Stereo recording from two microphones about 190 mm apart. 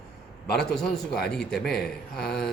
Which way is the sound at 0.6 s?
5° left (ahead or behind).